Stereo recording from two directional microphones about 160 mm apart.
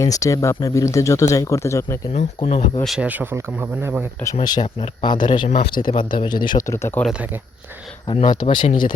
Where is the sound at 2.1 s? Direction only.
40° left (ahead or behind).